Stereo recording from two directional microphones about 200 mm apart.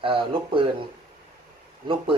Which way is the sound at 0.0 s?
25° right (ahead or behind).